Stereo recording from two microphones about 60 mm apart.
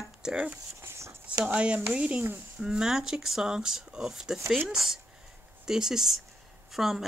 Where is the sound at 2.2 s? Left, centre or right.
Right.